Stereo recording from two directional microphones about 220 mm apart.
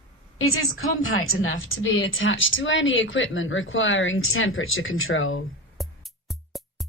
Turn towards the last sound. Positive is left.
turn(degrees=0)  # may be behind; listen again after turning